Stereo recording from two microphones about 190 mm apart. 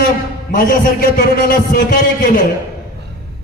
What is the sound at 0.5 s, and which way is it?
A man's voice, 45° left (ahead or behind).